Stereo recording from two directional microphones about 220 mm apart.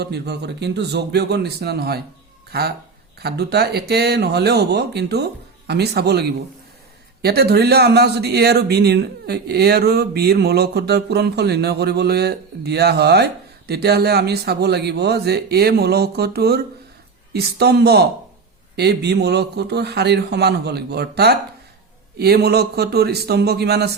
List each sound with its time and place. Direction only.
0.0 s speech: 50° right (ahead or behind)